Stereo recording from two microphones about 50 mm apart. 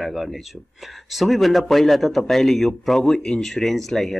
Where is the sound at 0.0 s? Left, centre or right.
Centre.